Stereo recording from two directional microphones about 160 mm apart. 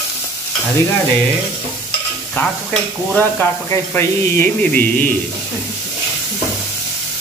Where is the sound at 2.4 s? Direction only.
15° left (ahead or behind).